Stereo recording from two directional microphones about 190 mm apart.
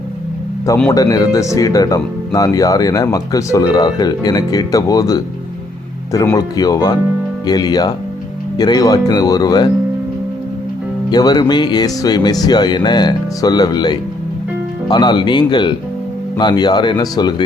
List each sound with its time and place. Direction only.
0.9 s speech: 20° left (ahead or behind)
6.3 s speech: 20° left (ahead or behind)
11.1 s speech: 20° left (ahead or behind)